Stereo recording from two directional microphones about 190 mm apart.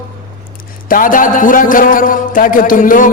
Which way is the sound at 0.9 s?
45° left (ahead or behind).